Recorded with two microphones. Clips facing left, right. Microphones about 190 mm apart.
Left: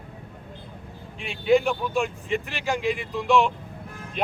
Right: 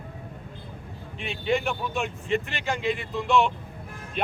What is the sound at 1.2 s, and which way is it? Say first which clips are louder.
Speech: left 6 dB; centre (ahead or behind).